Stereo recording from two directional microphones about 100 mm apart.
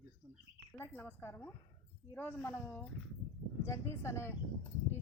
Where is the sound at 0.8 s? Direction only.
15° left (ahead or behind).